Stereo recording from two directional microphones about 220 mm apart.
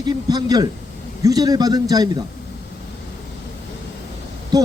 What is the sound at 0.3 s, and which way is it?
A man's voice, 15° right (ahead or behind).